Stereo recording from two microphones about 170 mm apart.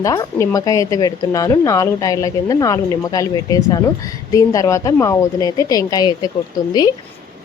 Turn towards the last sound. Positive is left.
turn(degrees=25)  # may be behind; listen again after turning